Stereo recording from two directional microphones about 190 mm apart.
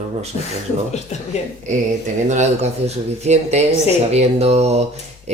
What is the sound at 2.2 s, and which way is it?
Speech, 35° right (ahead or behind).